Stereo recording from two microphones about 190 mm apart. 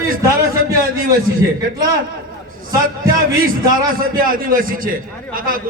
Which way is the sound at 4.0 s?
50° right (ahead or behind).